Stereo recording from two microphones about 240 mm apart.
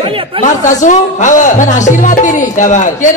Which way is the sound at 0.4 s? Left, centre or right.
Left.